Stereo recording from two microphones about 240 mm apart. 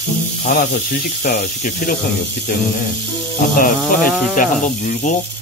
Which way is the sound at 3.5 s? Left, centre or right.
Left.